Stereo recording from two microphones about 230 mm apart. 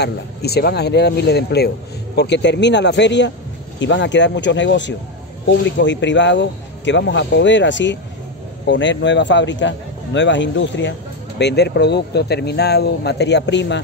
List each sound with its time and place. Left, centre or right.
0.0 s a man's voice: left